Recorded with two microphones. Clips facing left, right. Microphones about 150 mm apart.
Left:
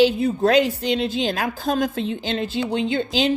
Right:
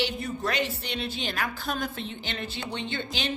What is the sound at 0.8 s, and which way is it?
Speech, 90° left.